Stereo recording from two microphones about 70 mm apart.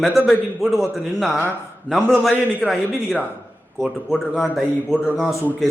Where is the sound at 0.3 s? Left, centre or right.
Centre.